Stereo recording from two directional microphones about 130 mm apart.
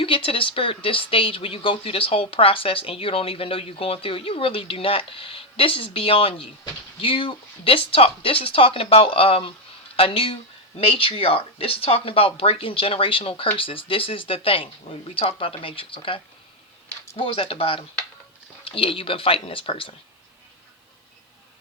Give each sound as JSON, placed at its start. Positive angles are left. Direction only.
{"t": 0.0, "sound": "speech", "side_deg": 45}